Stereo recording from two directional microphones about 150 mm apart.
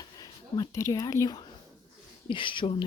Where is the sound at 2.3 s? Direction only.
35° left (ahead or behind).